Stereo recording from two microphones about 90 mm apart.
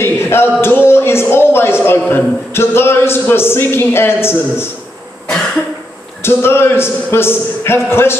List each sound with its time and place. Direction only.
0.0 s a man's voice: 25° left (ahead or behind)
6.2 s a man's voice: 25° left (ahead or behind)